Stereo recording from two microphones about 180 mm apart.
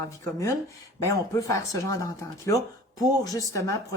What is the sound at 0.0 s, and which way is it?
A woman's voice, 15° left (ahead or behind).